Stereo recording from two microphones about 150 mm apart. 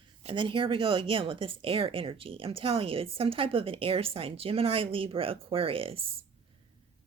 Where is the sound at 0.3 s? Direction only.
35° right (ahead or behind).